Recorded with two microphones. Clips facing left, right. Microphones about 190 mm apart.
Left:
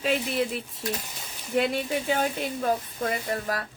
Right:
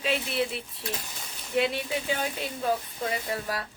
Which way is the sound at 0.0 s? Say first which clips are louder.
Left 2 dB; 45° left (ahead or behind).